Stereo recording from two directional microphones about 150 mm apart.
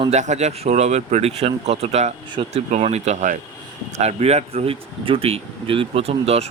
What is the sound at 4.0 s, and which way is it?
Speech, 45° right (ahead or behind).